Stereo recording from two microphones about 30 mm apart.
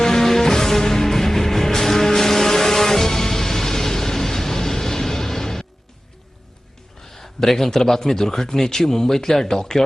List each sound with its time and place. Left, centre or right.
0.0 s music: centre
7.1 s speech: centre